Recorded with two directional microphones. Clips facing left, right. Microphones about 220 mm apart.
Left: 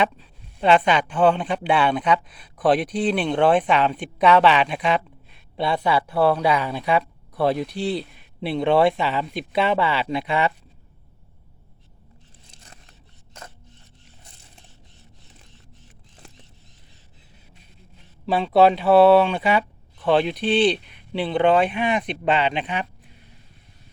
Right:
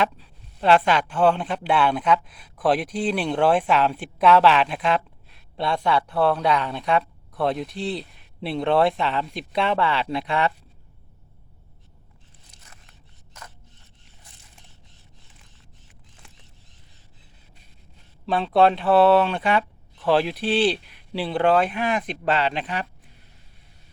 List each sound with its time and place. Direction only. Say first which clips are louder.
0.2 s speech: left 3 dB; centre (ahead or behind)
12.5 s scissors: left 4 dB; 30° left (ahead or behind)
18.3 s speech: left 2 dB; 5° left (ahead or behind)